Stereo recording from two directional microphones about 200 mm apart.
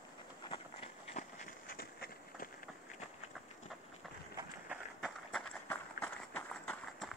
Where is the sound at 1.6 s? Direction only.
50° left (ahead or behind).